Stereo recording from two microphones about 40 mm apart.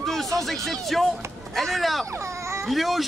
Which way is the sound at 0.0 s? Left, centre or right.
Centre.